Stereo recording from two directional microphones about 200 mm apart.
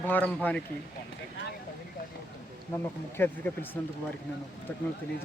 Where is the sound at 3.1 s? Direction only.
10° left (ahead or behind).